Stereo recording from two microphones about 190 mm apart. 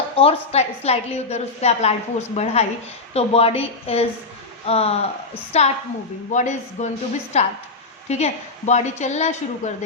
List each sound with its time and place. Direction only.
0.2 s a woman's voice: 30° left (ahead or behind)